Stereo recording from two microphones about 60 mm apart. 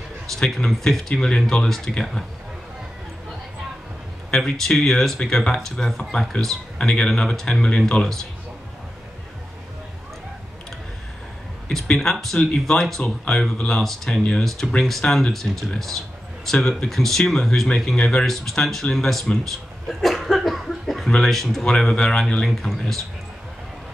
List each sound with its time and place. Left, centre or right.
0.3 s speech: centre
4.3 s speech: centre
11.7 s speech: centre